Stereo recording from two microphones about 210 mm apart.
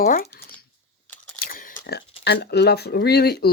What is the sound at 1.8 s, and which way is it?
Speech, 50° left (ahead or behind).